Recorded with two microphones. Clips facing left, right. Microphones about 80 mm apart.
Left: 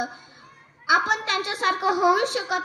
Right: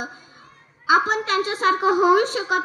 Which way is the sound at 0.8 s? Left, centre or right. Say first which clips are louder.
Right 3 dB; right.